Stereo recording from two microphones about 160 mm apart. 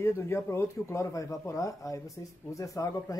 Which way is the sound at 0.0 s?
15° left (ahead or behind).